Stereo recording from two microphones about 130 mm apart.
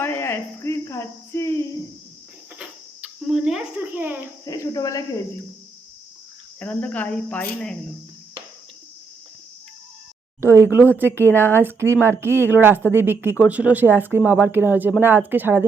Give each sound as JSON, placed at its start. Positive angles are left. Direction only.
{"t": 0.0, "sound": "cricket", "side_deg": 20}
{"t": 2.6, "sound": "cricket", "side_deg": -5}
{"t": 4.4, "sound": "speech", "side_deg": 25}
{"t": 6.6, "sound": "speech", "side_deg": 10}
{"t": 10.4, "sound": "speech", "side_deg": -20}